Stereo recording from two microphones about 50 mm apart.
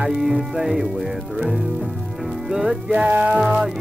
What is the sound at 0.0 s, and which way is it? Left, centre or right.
Speech, centre.